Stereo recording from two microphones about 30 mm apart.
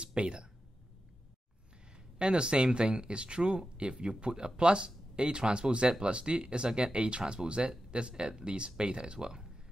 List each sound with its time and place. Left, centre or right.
0.0 s speech: right
2.1 s speech: right